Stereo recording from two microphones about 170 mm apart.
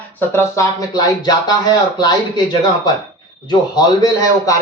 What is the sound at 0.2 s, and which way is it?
A man's voice, 15° left (ahead or behind).